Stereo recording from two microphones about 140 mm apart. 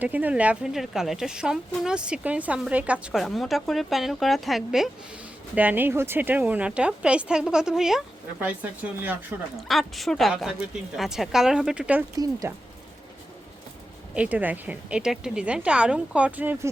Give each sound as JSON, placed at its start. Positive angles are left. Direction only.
{"t": 0.0, "sound": "speech", "side_deg": -10}
{"t": 5.5, "sound": "a woman's voice", "side_deg": -15}
{"t": 9.6, "sound": "speech", "side_deg": 0}
{"t": 12.4, "sound": "speech", "side_deg": -20}
{"t": 14.1, "sound": "a woman's voice", "side_deg": -10}